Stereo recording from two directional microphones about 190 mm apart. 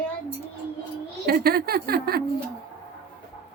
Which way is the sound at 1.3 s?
55° right (ahead or behind).